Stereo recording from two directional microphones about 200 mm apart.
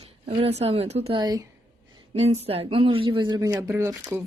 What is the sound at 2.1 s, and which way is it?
Speech, 30° right (ahead or behind).